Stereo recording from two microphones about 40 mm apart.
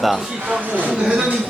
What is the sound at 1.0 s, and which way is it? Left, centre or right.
Speech, right.